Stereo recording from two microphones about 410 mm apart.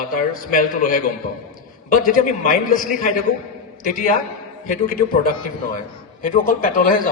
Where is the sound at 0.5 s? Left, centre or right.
Centre.